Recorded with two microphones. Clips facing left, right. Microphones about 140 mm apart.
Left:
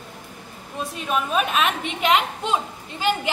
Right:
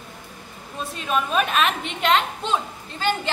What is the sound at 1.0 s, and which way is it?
A woman's voice, 5° left (ahead or behind).